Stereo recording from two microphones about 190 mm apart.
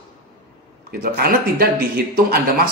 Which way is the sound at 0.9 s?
55° right (ahead or behind).